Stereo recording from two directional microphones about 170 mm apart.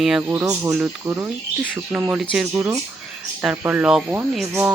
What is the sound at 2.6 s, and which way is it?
Speech, 15° right (ahead or behind).